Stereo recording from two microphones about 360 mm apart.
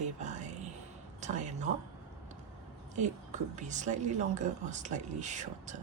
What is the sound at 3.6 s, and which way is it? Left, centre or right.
Speech, centre.